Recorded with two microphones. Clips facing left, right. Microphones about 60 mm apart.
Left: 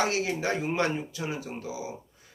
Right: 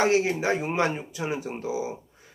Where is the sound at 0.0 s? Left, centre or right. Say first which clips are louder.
Right 5 dB; right.